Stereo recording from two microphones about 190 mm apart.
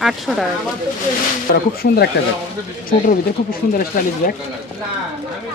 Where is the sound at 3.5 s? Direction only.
50° left (ahead or behind).